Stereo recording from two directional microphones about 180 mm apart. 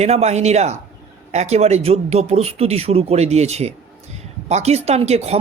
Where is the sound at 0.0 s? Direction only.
35° right (ahead or behind).